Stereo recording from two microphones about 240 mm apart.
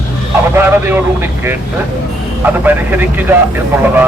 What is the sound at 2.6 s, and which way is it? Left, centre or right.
Speech, centre.